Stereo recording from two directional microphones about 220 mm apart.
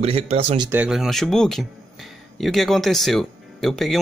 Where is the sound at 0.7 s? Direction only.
5° right (ahead or behind).